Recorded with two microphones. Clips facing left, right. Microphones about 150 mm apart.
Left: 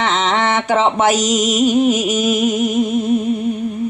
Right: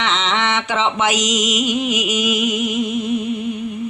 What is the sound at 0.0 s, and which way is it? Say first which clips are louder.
Music: left 4 dB; 45° left (ahead or behind).